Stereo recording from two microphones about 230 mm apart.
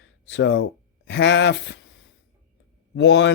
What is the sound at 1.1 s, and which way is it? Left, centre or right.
Speech, left.